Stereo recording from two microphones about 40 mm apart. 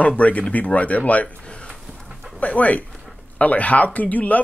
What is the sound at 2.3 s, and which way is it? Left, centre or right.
Speech, left.